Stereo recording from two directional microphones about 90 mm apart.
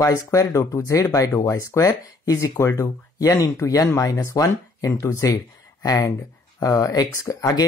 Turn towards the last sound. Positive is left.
turn(degrees=40)  # may be behind; listen again after turning